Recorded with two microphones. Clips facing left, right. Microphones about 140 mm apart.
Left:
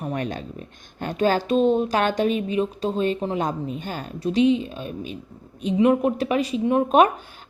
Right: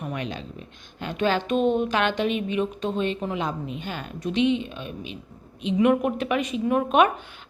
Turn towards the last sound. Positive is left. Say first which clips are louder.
# left 3 dB
turn(degrees=35)  # may be behind; listen again after turning